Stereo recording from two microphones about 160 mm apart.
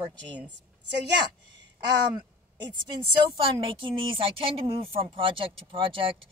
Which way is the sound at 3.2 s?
30° right (ahead or behind).